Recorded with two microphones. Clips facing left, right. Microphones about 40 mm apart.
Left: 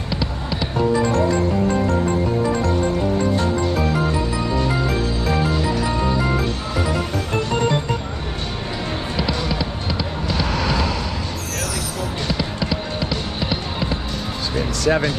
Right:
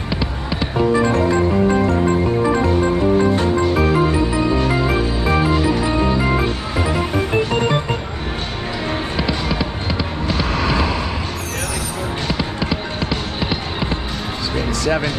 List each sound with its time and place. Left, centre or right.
0.1 s music: centre
9.1 s music: centre
12.3 s music: right